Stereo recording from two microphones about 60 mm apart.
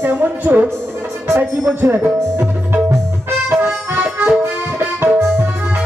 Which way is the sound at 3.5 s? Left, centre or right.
Right.